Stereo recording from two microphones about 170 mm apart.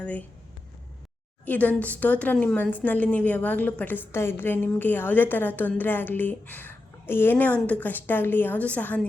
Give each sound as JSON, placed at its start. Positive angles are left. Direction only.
{"t": 0.0, "sound": "speech", "side_deg": 10}
{"t": 1.5, "sound": "a woman's voice", "side_deg": 10}